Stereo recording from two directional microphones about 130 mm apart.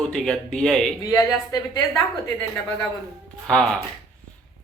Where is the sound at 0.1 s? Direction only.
5° left (ahead or behind).